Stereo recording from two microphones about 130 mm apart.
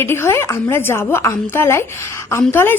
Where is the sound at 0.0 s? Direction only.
20° left (ahead or behind).